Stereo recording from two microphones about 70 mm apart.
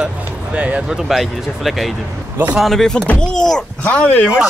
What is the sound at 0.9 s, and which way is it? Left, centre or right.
Speech, centre.